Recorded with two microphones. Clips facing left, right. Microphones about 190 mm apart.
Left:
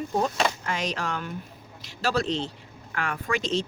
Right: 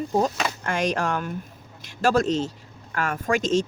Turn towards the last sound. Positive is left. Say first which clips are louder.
# right 5 dB
turn(degrees=-45)  # may be behind; listen again after turning